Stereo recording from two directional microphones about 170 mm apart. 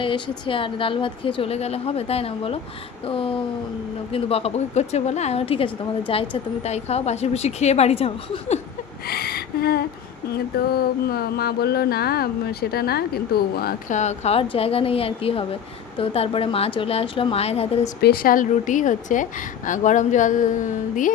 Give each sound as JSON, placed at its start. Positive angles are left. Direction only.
{"t": 0.0, "sound": "a woman's voice", "side_deg": 30}
{"t": 9.0, "sound": "a sound", "side_deg": 65}
{"t": 11.1, "sound": "speech", "side_deg": 65}
{"t": 13.9, "sound": "a woman's voice", "side_deg": 40}
{"t": 18.0, "sound": "a woman's voice", "side_deg": 60}